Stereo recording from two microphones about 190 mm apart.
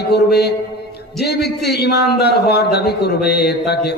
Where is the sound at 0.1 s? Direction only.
60° left (ahead or behind).